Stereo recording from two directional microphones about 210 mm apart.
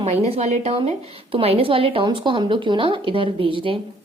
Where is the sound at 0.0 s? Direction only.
30° right (ahead or behind).